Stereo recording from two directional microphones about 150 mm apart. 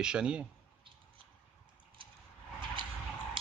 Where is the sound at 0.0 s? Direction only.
5° right (ahead or behind).